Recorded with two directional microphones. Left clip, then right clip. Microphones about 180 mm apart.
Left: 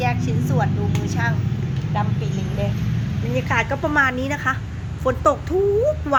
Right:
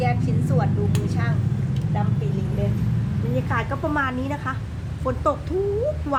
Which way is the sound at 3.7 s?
10° left (ahead or behind).